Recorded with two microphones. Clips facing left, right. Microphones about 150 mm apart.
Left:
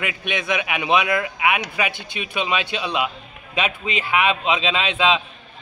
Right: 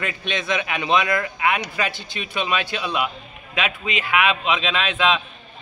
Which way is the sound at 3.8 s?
30° left (ahead or behind).